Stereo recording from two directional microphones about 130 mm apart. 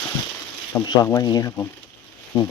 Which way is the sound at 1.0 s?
25° left (ahead or behind).